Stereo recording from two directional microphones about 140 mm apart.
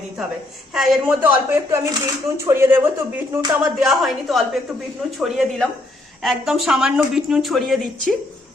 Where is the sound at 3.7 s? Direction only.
Centre (ahead or behind).